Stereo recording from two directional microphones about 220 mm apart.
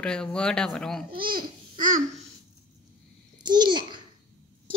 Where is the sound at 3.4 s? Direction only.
20° right (ahead or behind).